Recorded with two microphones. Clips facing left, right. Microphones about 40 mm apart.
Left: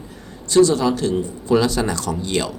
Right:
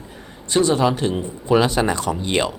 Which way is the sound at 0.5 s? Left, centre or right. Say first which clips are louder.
Left 2 dB; right.